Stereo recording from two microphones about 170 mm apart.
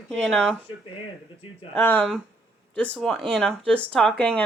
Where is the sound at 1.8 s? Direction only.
10° left (ahead or behind).